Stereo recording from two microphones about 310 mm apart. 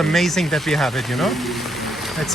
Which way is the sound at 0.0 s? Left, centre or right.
Centre.